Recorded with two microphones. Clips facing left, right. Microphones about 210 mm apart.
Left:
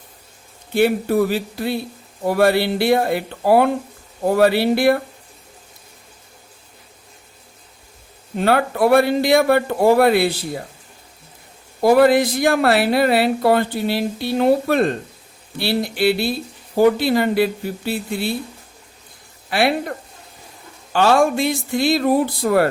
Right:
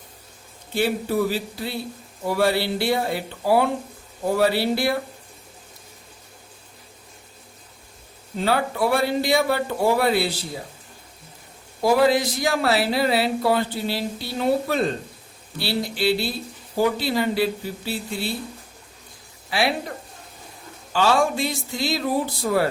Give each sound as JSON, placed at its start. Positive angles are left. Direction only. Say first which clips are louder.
{"t": 0.7, "sound": "speech", "louder": "left 6 dB", "side_deg": 60}
{"t": 8.4, "sound": "speech", "louder": "left 5 dB", "side_deg": 55}
{"t": 11.8, "sound": "speech", "louder": "left 5 dB", "side_deg": 55}
{"t": 19.5, "sound": "speech", "louder": "left 5 dB", "side_deg": 55}
{"t": 20.9, "sound": "speech", "louder": "left 5 dB", "side_deg": 55}